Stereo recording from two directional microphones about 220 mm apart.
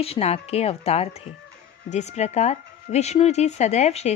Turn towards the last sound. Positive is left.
turn(degrees=30)  # may be behind; listen again after turning